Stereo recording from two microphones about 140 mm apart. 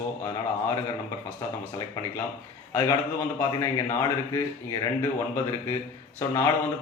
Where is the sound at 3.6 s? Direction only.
20° left (ahead or behind).